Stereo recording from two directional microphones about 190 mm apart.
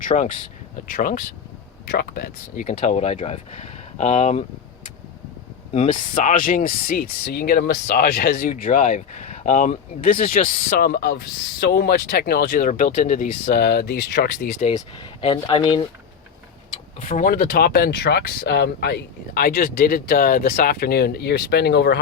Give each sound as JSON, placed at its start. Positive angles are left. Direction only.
{"t": 0.0, "sound": "speech", "side_deg": 40}
{"t": 5.7, "sound": "speech", "side_deg": 35}
{"t": 15.2, "sound": "speech", "side_deg": 25}
{"t": 17.0, "sound": "speech", "side_deg": 45}